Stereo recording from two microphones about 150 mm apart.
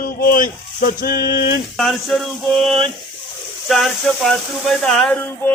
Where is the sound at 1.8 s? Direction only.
Centre (ahead or behind).